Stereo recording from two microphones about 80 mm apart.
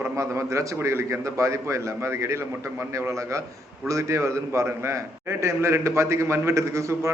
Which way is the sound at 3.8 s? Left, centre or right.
Right.